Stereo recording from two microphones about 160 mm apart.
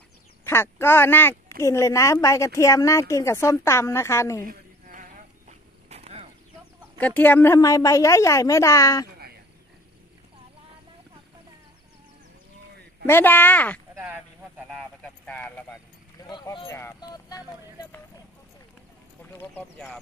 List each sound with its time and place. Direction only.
0.4 s a woman's voice: 15° left (ahead or behind)
4.5 s insect: 55° right (ahead or behind)
5.5 s a sound: 40° right (ahead or behind)
7.0 s a woman's voice: 10° left (ahead or behind)
13.0 s speech: 15° left (ahead or behind)
13.9 s speech: 10° right (ahead or behind)
14.7 s speech: 5° left (ahead or behind)
16.3 s speech: 30° left (ahead or behind)
16.6 s a woman's voice: 15° left (ahead or behind)
19.2 s speech: 15° left (ahead or behind)